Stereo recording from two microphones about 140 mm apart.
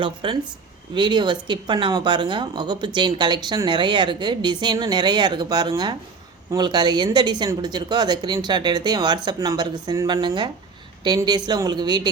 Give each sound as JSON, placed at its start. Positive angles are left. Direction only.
{"t": 0.0, "sound": "speech", "side_deg": -35}